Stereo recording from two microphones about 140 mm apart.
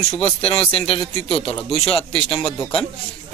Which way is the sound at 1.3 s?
5° left (ahead or behind).